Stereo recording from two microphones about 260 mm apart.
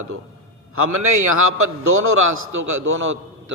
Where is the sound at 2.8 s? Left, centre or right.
Right.